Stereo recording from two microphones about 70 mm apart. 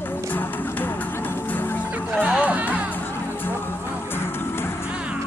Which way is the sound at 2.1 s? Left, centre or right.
Centre.